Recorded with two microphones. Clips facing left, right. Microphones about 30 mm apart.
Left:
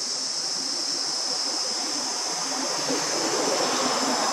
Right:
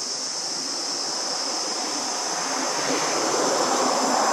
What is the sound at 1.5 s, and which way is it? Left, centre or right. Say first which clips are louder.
Vehicle: right 2 dB; right.